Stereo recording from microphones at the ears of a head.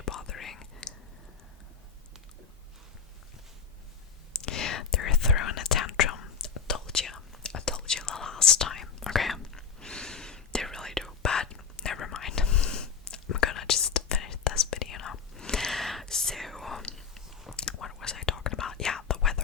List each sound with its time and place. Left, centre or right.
0.0 s whispering: left
4.3 s whispering: left
9.9 s whispering: centre
11.2 s whispering: left
15.7 s whispering: centre
17.6 s whispering: left